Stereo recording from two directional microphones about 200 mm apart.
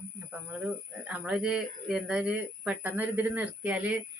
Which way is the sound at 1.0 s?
5° right (ahead or behind).